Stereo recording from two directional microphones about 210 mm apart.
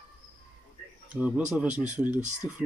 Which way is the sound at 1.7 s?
35° right (ahead or behind).